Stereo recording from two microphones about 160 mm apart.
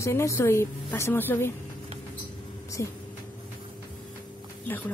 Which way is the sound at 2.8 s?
20° left (ahead or behind).